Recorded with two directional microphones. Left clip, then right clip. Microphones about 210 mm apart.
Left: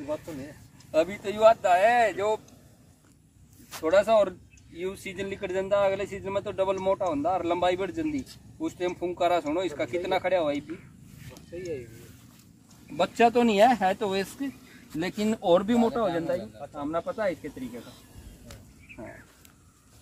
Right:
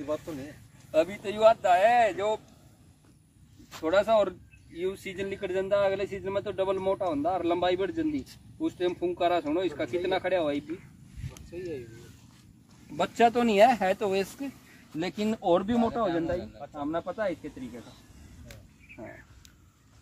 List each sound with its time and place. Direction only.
0.9 s speech: 5° left (ahead or behind)
3.7 s speech: 5° left (ahead or behind)
12.9 s speech: 5° right (ahead or behind)
15.0 s speech: 15° left (ahead or behind)